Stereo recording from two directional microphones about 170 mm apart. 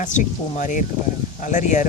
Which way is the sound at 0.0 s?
45° left (ahead or behind).